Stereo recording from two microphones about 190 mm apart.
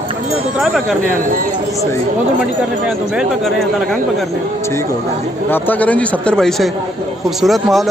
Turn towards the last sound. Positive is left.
turn(degrees=0)  # may be behind; listen again after turning